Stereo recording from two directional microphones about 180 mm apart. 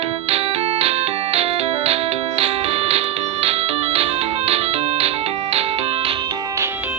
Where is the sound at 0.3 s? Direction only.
35° right (ahead or behind).